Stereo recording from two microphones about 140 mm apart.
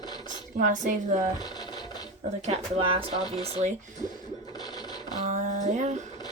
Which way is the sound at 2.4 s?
45° right (ahead or behind).